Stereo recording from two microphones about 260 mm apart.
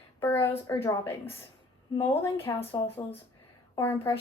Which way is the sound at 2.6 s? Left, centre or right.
Left.